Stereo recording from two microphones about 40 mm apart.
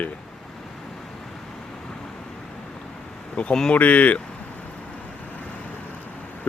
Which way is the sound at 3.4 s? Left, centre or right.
Left.